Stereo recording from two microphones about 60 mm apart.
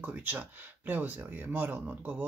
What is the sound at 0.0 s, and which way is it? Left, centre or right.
Speech, right.